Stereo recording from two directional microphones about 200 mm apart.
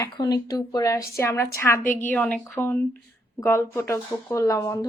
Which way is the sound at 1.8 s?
40° left (ahead or behind).